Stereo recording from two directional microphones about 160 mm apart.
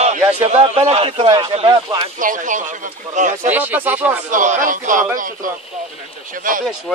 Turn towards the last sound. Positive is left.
turn(degrees=-55)  # may be behind; listen again after turning